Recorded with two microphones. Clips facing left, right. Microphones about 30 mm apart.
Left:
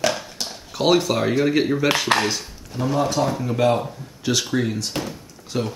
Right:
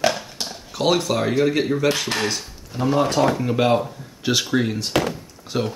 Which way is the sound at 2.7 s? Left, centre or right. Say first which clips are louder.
Right 2 dB; centre.